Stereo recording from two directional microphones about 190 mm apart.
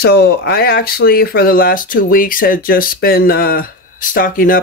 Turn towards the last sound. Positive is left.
turn(degrees=45)  # may be behind; listen again after turning